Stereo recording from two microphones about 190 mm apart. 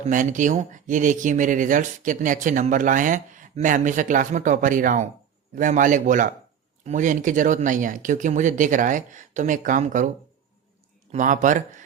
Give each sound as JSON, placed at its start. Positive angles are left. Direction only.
{"t": 0.1, "sound": "speech", "side_deg": -40}
{"t": 11.1, "sound": "speech", "side_deg": -40}